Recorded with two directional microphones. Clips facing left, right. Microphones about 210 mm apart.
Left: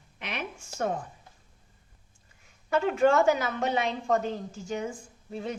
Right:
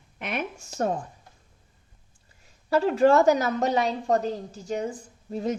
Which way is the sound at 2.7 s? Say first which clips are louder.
Right 4 dB; 35° right (ahead or behind).